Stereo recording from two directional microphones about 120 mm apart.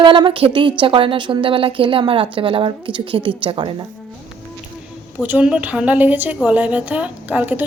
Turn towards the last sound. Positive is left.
turn(degrees=-15)  # may be behind; listen again after turning